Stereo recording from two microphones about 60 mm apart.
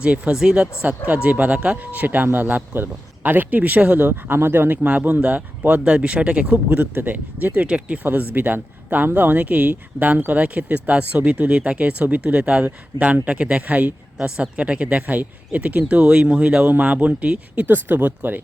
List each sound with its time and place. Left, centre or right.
0.0 s speech: centre
5.8 s speech: centre
7.5 s speech: right
16.6 s speech: right